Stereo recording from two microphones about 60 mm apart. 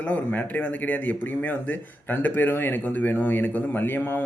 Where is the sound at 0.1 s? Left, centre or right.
Left.